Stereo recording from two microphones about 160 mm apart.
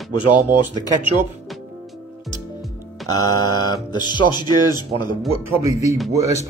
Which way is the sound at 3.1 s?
25° left (ahead or behind).